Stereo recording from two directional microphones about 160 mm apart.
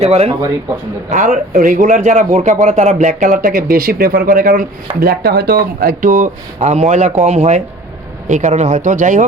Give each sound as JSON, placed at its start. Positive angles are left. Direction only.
{"t": 0.0, "sound": "speech", "side_deg": -40}
{"t": 1.1, "sound": "a man's voice", "side_deg": -55}
{"t": 5.0, "sound": "speech", "side_deg": -75}
{"t": 6.0, "sound": "a man's voice", "side_deg": -55}